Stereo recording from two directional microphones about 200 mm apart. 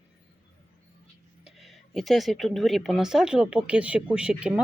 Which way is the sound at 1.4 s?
Centre (ahead or behind).